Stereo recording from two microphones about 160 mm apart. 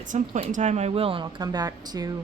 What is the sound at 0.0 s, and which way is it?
Speech, 45° right (ahead or behind).